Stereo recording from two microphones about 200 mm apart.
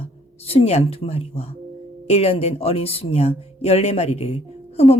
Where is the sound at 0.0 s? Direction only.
30° left (ahead or behind).